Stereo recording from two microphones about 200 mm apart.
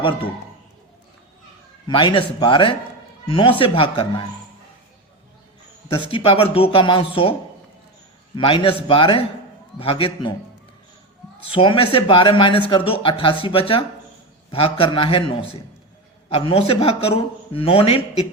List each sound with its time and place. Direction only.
0.0 s a man's voice: 25° left (ahead or behind)
1.9 s a man's voice: 25° left (ahead or behind)
5.9 s a man's voice: 30° left (ahead or behind)
8.4 s a man's voice: 25° left (ahead or behind)
11.5 s a man's voice: 25° left (ahead or behind)